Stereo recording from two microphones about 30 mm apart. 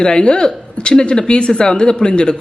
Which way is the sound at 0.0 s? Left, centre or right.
Left.